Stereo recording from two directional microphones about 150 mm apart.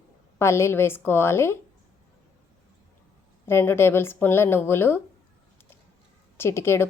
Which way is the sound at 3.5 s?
15° left (ahead or behind).